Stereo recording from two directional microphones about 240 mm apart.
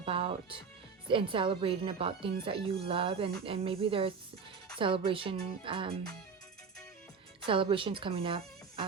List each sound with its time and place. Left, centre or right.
0.0 s music: right
1.0 s speech: right
7.4 s speech: right